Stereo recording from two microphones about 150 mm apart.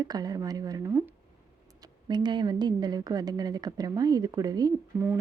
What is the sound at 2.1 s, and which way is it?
Speech, 30° right (ahead or behind).